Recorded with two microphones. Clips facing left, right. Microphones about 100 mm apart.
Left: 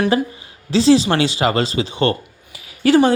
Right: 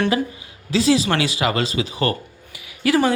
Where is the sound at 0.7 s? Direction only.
30° left (ahead or behind).